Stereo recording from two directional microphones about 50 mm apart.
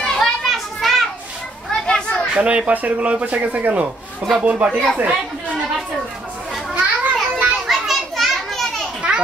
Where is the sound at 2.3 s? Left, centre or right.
Right.